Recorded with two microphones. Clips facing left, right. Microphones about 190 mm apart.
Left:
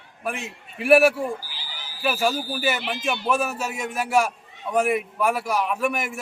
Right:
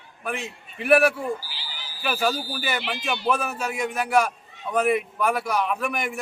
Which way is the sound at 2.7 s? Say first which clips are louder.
Left 2 dB; 5° left (ahead or behind).